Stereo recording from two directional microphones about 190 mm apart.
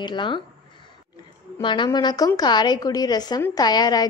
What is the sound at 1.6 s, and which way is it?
A woman's voice, 25° left (ahead or behind).